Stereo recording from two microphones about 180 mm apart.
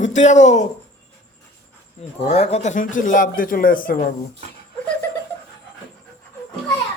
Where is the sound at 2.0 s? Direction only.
35° left (ahead or behind); by 4.1 s 50° left (ahead or behind).